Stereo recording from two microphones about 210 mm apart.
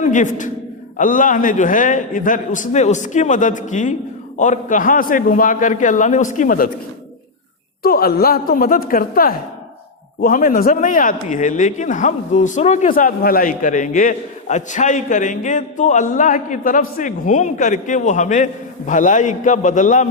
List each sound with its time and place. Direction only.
0.0 s a man's voice: 35° left (ahead or behind)
7.8 s a woman's voice: 45° left (ahead or behind)